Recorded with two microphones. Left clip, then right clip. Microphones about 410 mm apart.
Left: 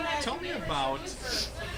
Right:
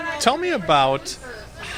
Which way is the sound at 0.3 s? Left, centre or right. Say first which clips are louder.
Right 15 dB; right.